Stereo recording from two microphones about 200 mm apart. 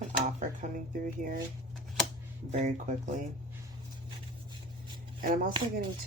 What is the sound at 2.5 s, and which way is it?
Speech, 35° right (ahead or behind).